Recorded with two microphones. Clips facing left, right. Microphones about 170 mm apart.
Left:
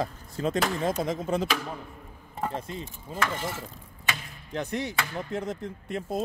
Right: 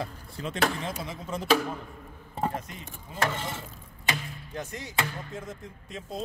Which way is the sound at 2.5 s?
30° left (ahead or behind).